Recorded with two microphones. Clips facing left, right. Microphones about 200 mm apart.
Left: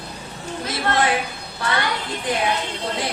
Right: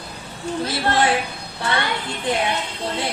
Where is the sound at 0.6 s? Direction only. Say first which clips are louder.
Right 1 dB; 30° right (ahead or behind).